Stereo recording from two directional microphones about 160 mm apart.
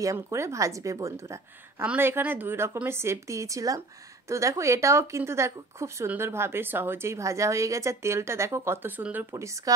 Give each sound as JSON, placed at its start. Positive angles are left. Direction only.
{"t": 0.0, "sound": "a woman's voice", "side_deg": -20}